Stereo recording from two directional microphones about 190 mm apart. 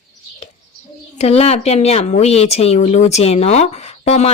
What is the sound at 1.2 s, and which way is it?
Speech, 35° left (ahead or behind).